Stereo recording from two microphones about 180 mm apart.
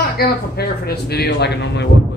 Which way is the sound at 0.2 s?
60° left (ahead or behind).